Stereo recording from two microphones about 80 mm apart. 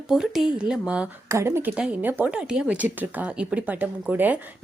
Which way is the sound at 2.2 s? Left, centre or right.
Centre.